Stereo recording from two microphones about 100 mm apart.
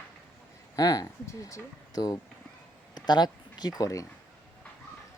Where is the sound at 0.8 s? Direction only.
40° left (ahead or behind).